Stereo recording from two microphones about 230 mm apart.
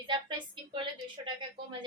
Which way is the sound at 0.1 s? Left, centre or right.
Centre.